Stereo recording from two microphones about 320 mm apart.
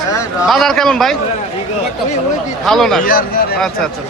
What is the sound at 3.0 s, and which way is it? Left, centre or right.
Speech, left.